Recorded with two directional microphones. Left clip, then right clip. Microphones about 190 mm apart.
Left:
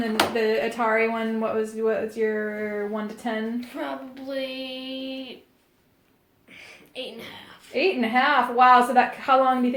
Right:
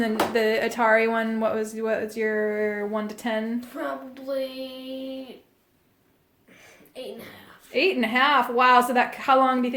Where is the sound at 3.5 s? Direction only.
15° right (ahead or behind).